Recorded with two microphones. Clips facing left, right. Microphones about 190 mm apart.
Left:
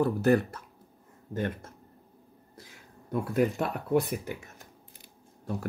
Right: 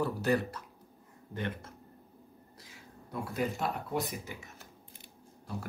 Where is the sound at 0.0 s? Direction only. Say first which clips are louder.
Left 6 dB; 50° left (ahead or behind).